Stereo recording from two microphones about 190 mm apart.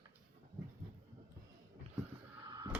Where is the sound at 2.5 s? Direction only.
20° right (ahead or behind).